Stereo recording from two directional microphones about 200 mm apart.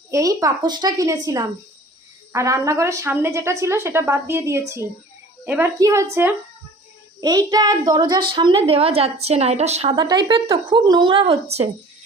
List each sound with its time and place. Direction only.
0.1 s a woman's voice: 15° right (ahead or behind); by 9.9 s 35° right (ahead or behind)
9.9 s speech: 20° right (ahead or behind)